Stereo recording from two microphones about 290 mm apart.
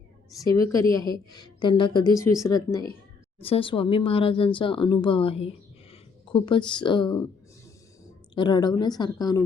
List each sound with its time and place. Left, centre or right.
0.4 s a woman's voice: centre